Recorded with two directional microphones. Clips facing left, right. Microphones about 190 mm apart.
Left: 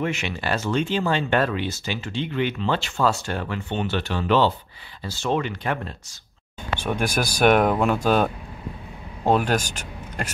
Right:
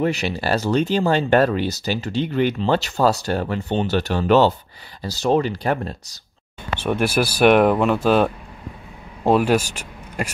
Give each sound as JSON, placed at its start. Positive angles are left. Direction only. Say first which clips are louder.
{"t": 0.0, "sound": "speech", "louder": "right 5 dB", "side_deg": -35}
{"t": 6.9, "sound": "speech", "louder": "right 5 dB", "side_deg": -5}